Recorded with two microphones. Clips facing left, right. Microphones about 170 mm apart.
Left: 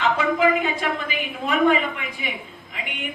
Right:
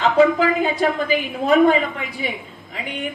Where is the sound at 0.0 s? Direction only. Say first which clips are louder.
Right 5 dB; 35° right (ahead or behind).